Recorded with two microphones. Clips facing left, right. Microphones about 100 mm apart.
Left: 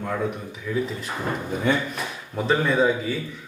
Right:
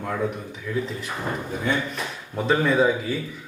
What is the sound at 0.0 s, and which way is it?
Speech, centre (ahead or behind).